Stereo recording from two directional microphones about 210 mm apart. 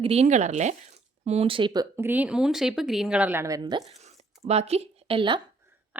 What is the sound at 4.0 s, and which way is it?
Zipper, 30° right (ahead or behind).